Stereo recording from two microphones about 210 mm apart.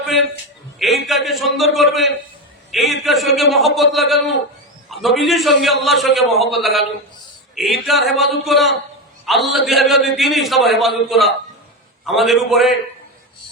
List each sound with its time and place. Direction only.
0.8 s a man's voice: centre (ahead or behind)